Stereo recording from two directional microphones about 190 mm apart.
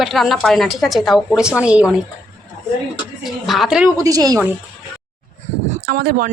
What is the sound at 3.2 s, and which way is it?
Speech, centre (ahead or behind).